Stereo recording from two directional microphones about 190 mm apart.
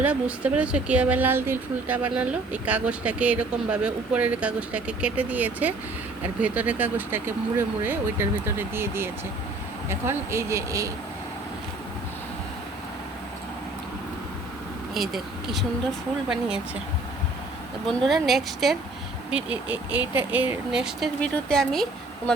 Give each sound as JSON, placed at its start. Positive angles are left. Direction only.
{"t": 0.0, "sound": "speech", "side_deg": -5}
{"t": 14.9, "sound": "speech", "side_deg": 0}
{"t": 17.8, "sound": "speech", "side_deg": 0}